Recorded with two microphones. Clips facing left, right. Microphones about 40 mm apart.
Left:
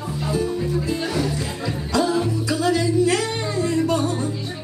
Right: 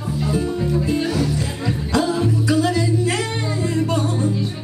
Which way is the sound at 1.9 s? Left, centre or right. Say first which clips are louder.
Right 1 dB; right.